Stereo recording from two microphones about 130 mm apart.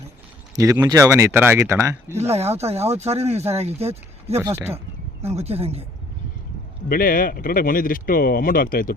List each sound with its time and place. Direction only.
0.5 s speech: 25° right (ahead or behind)
2.3 s speech: 55° right (ahead or behind)
4.7 s speech: 20° right (ahead or behind)
5.3 s speech: 55° right (ahead or behind)
6.9 s speech: 90° left